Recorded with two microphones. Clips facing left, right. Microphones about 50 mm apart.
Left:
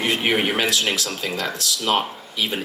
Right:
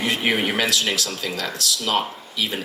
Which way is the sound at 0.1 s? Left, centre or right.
Left.